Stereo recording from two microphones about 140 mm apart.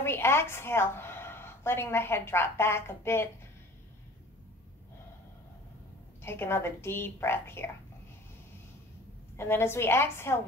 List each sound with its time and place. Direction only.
0.0 s a woman's voice: 15° left (ahead or behind)
6.2 s a woman's voice: 15° left (ahead or behind)
9.4 s a woman's voice: 15° left (ahead or behind)